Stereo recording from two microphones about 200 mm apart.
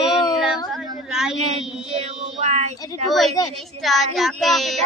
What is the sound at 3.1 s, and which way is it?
Speech, centre (ahead or behind).